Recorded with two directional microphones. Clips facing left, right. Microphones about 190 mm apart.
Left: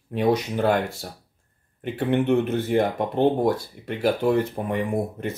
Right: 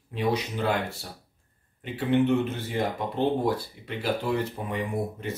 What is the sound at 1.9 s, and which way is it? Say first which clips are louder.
Speech: left 2 dB; 55° left (ahead or behind).